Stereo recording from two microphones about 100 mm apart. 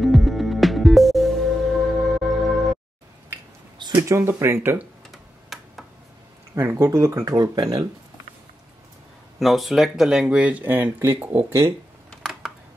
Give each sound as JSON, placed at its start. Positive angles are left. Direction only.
{"t": 0.0, "sound": "music", "side_deg": 0}
{"t": 3.7, "sound": "a sound", "side_deg": -45}
{"t": 4.1, "sound": "speech", "side_deg": -25}
{"t": 5.1, "sound": "tick-tock", "side_deg": 0}
{"t": 6.5, "sound": "speech", "side_deg": -30}
{"t": 9.4, "sound": "speech", "side_deg": 0}